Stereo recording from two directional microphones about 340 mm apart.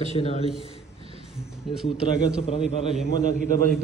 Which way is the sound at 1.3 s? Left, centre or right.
Centre.